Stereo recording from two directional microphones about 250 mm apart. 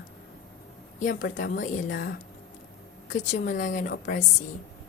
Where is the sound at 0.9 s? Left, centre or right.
Left.